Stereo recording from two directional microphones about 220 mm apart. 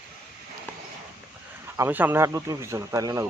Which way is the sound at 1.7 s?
10° right (ahead or behind).